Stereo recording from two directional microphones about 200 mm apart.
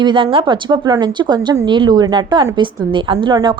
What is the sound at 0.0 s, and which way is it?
A woman's voice, 25° right (ahead or behind).